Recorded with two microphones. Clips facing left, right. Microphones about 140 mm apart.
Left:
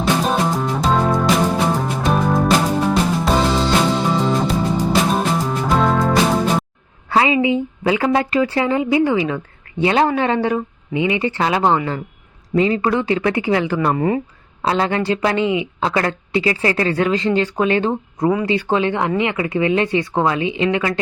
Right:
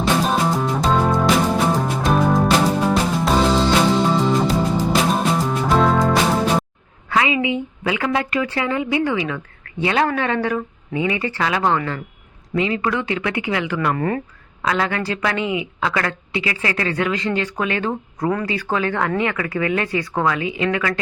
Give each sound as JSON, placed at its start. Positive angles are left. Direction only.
{"t": 0.0, "sound": "music", "side_deg": 0}
{"t": 7.1, "sound": "a woman's voice", "side_deg": 30}
{"t": 13.9, "sound": "speech", "side_deg": 15}
{"t": 14.6, "sound": "a woman's voice", "side_deg": 30}